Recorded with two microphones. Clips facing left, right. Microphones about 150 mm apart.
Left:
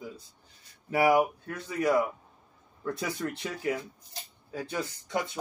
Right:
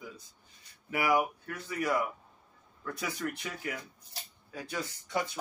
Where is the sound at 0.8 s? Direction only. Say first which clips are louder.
Left 5 dB; 30° left (ahead or behind).